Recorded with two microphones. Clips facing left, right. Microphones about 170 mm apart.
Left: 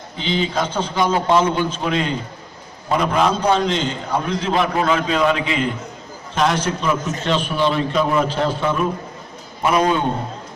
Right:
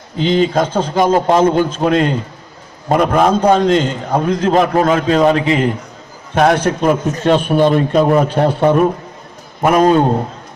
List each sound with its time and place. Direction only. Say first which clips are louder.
0.2 s a man's voice: right 8 dB; 45° right (ahead or behind)
6.3 s a man's voice: right 7 dB; 55° right (ahead or behind)